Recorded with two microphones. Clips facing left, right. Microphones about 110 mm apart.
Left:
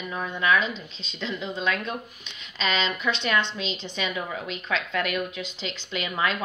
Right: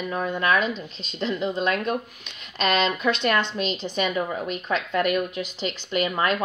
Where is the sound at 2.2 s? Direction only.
55° right (ahead or behind).